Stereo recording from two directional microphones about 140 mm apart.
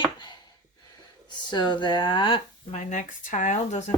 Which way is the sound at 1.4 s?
30° left (ahead or behind).